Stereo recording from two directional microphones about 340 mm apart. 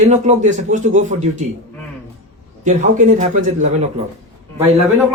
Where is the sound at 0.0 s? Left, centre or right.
Right.